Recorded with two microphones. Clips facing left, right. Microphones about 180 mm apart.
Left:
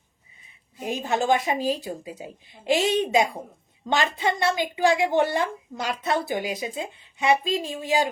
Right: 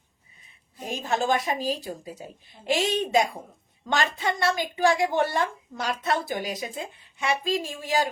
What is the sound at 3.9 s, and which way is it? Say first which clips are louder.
A woman's voice: left 2 dB; 20° left (ahead or behind).